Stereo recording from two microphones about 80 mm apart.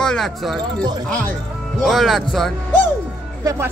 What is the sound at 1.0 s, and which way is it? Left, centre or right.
Speech, centre.